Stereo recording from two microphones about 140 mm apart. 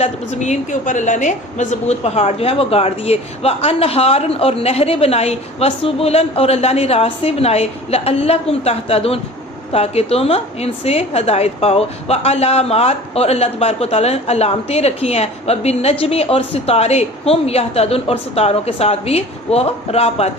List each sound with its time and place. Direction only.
0.0 s a woman's voice: 55° left (ahead or behind)